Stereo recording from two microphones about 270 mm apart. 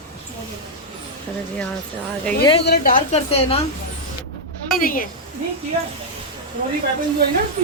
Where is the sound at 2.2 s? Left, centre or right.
Centre.